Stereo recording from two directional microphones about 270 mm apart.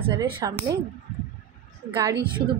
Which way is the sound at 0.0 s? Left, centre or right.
Centre.